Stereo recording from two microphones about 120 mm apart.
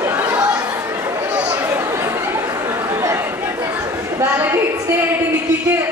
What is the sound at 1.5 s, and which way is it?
Chatter, 20° right (ahead or behind).